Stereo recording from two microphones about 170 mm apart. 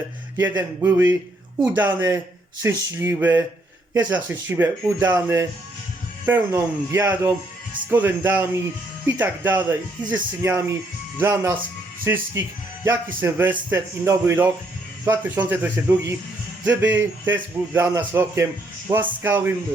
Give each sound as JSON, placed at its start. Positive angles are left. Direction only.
{"t": 0.3, "sound": "speech", "side_deg": -15}